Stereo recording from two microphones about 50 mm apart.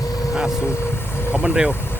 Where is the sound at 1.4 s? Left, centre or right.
Right.